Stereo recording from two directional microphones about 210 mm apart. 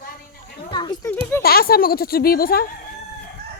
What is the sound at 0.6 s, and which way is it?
Speech, 20° left (ahead or behind).